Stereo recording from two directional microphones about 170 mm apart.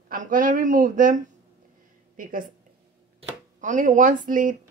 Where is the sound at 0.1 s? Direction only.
50° right (ahead or behind).